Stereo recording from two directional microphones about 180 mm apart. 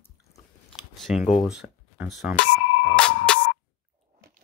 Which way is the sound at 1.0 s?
Centre (ahead or behind).